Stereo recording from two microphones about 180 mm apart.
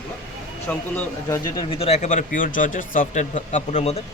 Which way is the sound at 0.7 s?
10° left (ahead or behind).